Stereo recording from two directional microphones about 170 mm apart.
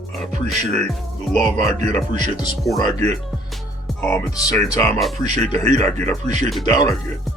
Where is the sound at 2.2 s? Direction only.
25° left (ahead or behind).